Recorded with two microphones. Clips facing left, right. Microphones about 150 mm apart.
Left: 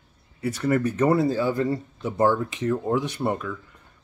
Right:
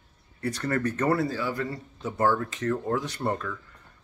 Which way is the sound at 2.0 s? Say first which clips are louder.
Left 2 dB; 15° left (ahead or behind).